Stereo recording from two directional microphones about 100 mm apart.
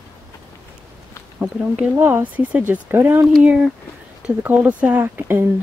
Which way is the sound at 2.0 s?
20° right (ahead or behind).